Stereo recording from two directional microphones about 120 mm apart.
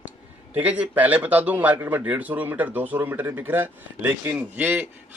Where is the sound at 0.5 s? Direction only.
15° right (ahead or behind).